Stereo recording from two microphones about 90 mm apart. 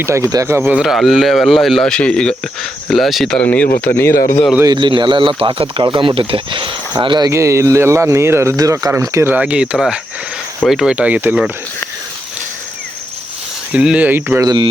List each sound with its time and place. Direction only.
0.0 s speech: 30° right (ahead or behind)
0.8 s speech: centre (ahead or behind)
3.3 s speech: 15° left (ahead or behind)
4.6 s speech: 55° right (ahead or behind); by 6.7 s 75° right (ahead or behind)
7.0 s speech: 60° right (ahead or behind)
7.3 s speech: 35° right (ahead or behind)
9.3 s speech: 15° right (ahead or behind)
10.7 s speech: centre (ahead or behind)
10.9 s speech: 15° right (ahead or behind)
13.7 s speech: 15° right (ahead or behind)